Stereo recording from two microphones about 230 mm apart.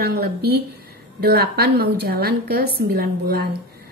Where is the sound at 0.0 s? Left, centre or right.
Right.